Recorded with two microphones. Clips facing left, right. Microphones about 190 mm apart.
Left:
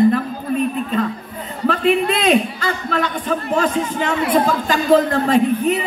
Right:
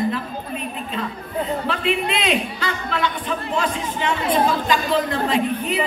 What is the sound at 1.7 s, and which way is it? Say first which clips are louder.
A man's voice: left 10 dB; 45° left (ahead or behind).